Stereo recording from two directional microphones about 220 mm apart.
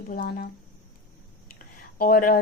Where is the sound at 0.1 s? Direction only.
40° left (ahead or behind).